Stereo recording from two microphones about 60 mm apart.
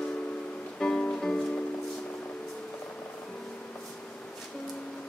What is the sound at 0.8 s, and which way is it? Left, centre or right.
Music, centre.